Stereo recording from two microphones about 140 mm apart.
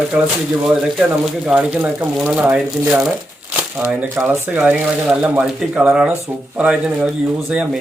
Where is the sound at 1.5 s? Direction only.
10° right (ahead or behind).